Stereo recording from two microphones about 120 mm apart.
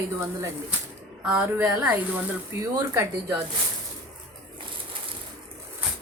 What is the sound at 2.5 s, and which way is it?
Speech, 25° right (ahead or behind).